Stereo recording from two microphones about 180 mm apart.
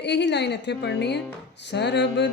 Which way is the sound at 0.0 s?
70° left (ahead or behind).